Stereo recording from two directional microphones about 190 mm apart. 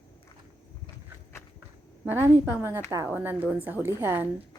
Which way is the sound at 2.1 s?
10° right (ahead or behind).